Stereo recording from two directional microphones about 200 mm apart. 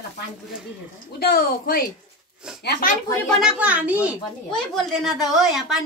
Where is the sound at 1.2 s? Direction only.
45° left (ahead or behind).